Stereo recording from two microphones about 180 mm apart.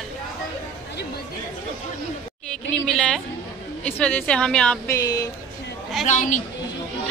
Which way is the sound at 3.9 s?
10° left (ahead or behind).